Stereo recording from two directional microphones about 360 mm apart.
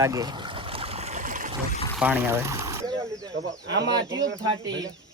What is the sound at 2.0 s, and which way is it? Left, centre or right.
Speech, centre.